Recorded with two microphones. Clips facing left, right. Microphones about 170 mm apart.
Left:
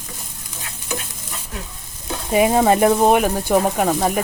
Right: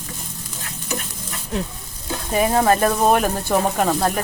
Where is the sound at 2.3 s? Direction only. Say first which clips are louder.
Left 2 dB; 20° left (ahead or behind).